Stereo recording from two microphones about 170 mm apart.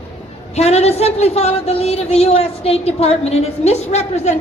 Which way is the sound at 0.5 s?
40° left (ahead or behind).